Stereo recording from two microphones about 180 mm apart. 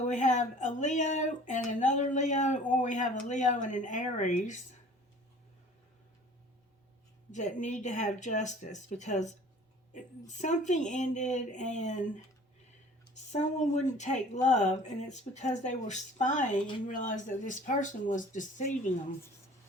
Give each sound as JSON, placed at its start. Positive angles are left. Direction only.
{"t": 0.0, "sound": "speech", "side_deg": 40}
{"t": 7.3, "sound": "speech", "side_deg": 40}
{"t": 13.3, "sound": "speech", "side_deg": 40}